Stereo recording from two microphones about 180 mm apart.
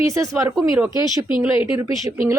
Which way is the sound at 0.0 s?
20° right (ahead or behind).